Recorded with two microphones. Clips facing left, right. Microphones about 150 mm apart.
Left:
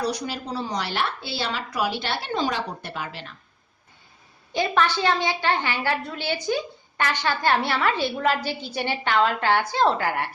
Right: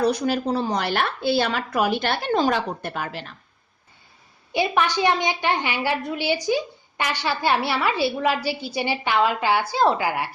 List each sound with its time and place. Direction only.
0.0 s a woman's voice: 50° right (ahead or behind)
4.5 s a woman's voice: 15° right (ahead or behind)